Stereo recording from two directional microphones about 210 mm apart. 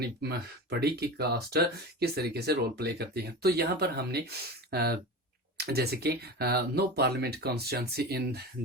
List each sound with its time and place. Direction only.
0.2 s speech: 50° right (ahead or behind)